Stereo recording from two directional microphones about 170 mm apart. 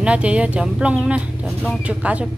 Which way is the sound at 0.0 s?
5° right (ahead or behind).